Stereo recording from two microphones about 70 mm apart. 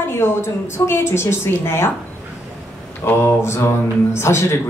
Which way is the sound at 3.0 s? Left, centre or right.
Left.